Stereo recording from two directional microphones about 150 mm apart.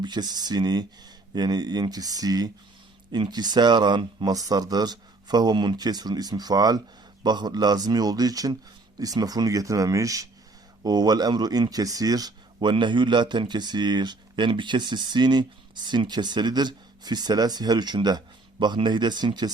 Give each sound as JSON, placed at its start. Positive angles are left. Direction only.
{"t": 0.0, "sound": "speech", "side_deg": -30}